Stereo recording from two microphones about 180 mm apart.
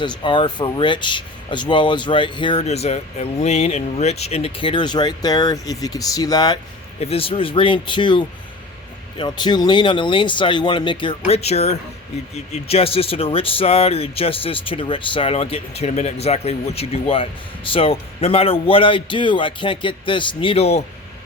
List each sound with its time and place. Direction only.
0.0 s speech: 25° left (ahead or behind)
7.0 s speech: 30° left (ahead or behind)